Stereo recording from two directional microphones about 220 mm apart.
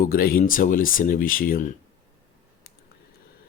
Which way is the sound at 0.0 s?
40° left (ahead or behind).